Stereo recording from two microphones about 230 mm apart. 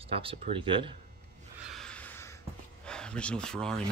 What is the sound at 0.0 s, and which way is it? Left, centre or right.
Speech, right.